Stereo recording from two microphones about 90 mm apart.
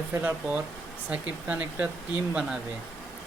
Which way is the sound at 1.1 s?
15° right (ahead or behind).